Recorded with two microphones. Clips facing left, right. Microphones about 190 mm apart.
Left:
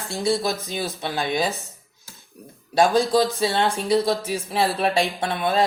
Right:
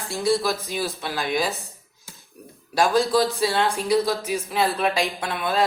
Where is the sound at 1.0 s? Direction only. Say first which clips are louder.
Left 3 dB; 25° left (ahead or behind).